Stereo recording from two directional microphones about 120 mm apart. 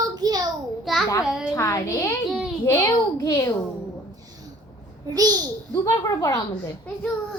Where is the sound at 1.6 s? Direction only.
25° left (ahead or behind).